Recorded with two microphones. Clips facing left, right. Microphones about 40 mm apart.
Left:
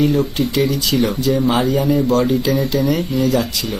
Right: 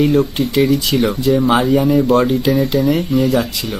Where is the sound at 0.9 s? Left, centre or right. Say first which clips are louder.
Right 1 dB; right.